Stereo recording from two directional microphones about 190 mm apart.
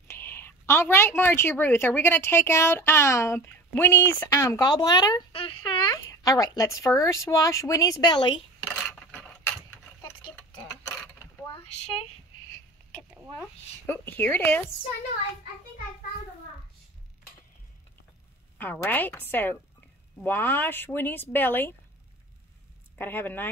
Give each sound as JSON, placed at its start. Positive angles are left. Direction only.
{"t": 0.1, "sound": "a woman's voice", "side_deg": 10}
{"t": 8.8, "sound": "a sound", "side_deg": 10}
{"t": 10.6, "sound": "clock", "side_deg": 10}
{"t": 11.5, "sound": "a sound", "side_deg": 30}
{"t": 13.4, "sound": "a woman's voice", "side_deg": 10}
{"t": 18.6, "sound": "a woman's voice", "side_deg": 10}
{"t": 22.9, "sound": "a woman's voice", "side_deg": 10}